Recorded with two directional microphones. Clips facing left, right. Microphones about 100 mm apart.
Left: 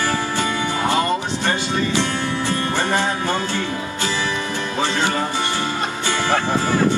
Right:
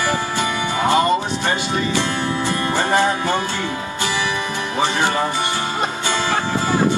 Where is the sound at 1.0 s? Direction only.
15° right (ahead or behind).